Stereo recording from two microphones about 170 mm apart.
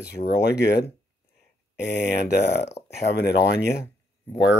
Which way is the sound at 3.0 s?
80° left.